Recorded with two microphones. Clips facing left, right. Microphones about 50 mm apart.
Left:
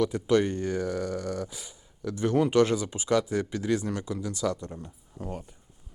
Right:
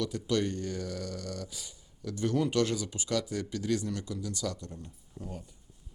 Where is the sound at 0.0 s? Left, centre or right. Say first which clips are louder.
Left 7 dB; left.